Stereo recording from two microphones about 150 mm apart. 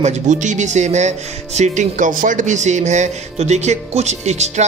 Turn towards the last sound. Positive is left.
turn(degrees=-50)  # may be behind; listen again after turning